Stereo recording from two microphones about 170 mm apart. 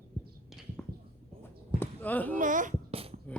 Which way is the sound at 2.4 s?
50° right (ahead or behind).